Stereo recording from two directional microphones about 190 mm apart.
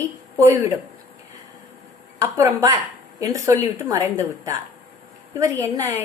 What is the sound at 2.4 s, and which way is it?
Speech, 15° right (ahead or behind).